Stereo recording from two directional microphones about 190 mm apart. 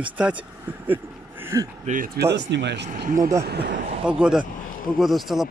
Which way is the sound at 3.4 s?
60° right (ahead or behind).